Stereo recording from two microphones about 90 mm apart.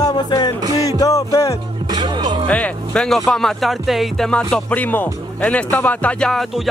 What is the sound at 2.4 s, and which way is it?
Speech, 15° left (ahead or behind).